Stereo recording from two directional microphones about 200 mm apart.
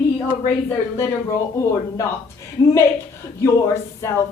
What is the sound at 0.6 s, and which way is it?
A woman's voice, 10° left (ahead or behind).